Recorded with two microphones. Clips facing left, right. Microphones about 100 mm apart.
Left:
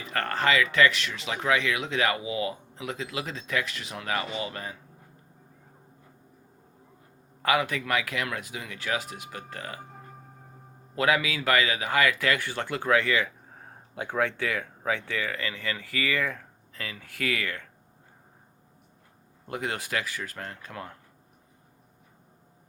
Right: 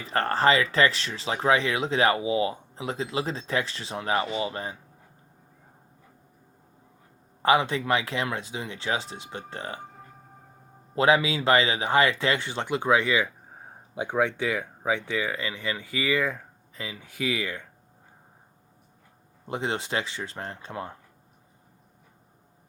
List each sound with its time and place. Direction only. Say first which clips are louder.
0.0 s speech: right 5 dB; 30° right (ahead or behind)
7.4 s speech: right 4 dB; 30° right (ahead or behind)
10.9 s speech: right 4 dB; 25° right (ahead or behind)
19.5 s speech: right 3 dB; 25° right (ahead or behind)